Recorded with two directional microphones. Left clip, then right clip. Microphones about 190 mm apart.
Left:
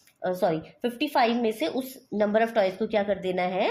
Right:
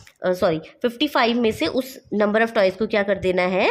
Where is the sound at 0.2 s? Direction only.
45° right (ahead or behind).